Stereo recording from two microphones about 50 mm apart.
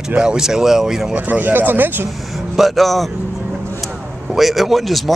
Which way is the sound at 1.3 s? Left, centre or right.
Right.